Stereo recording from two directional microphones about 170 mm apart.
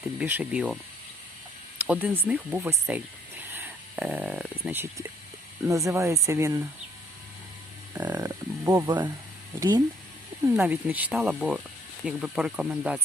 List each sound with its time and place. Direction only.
0.0 s speech: 10° right (ahead or behind)
1.8 s speech: 10° right (ahead or behind)
7.9 s speech: 15° right (ahead or behind)
9.6 s speech: 25° right (ahead or behind)
10.5 s speech: 10° right (ahead or behind)